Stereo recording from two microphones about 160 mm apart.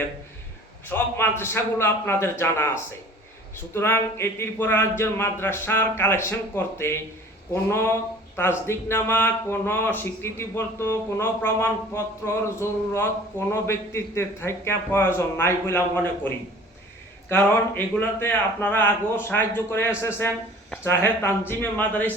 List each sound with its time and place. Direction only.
0.9 s speech: 15° left (ahead or behind)
17.2 s speech: 15° left (ahead or behind)